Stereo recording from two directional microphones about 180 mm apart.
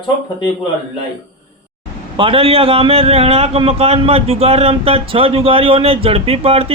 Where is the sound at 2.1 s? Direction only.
30° right (ahead or behind).